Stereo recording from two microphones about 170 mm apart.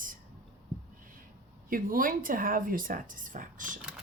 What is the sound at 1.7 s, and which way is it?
Speech, 55° right (ahead or behind).